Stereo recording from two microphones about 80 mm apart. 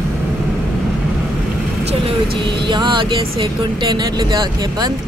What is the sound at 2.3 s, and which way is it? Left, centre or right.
Vehicle, right.